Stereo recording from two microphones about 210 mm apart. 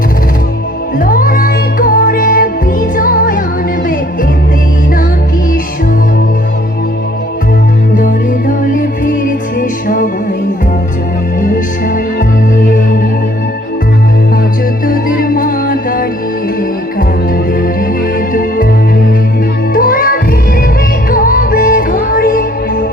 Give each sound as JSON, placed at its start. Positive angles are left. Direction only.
{"t": 0.9, "sound": "music", "side_deg": 40}
{"t": 7.9, "sound": "music", "side_deg": 40}
{"t": 12.6, "sound": "music", "side_deg": 40}
{"t": 14.8, "sound": "music", "side_deg": 45}
{"t": 18.3, "sound": "music", "side_deg": 40}
{"t": 19.7, "sound": "music", "side_deg": 40}